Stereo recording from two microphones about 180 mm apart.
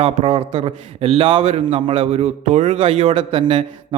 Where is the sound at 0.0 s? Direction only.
35° right (ahead or behind).